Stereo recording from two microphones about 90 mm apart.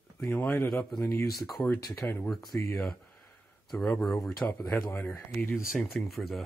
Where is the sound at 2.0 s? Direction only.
20° left (ahead or behind).